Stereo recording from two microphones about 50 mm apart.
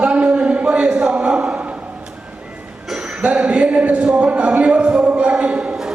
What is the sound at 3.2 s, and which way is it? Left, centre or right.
Speech, right.